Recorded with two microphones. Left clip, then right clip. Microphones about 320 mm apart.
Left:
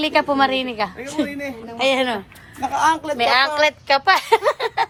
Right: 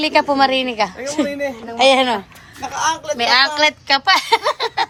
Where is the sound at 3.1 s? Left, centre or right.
Centre.